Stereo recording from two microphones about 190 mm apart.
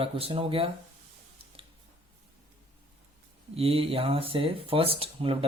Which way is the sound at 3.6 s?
30° right (ahead or behind).